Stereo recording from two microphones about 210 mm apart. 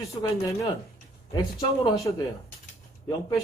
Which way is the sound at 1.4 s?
20° left (ahead or behind).